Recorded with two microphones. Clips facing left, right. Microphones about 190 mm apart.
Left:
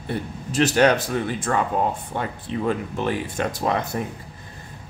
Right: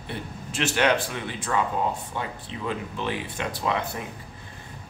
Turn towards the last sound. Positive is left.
turn(degrees=45)  # may be behind; listen again after turning